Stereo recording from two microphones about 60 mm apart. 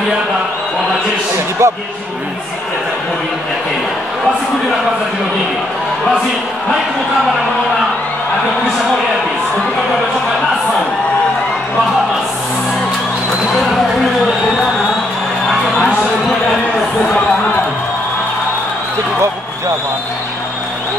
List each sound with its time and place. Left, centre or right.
1.6 s speech: right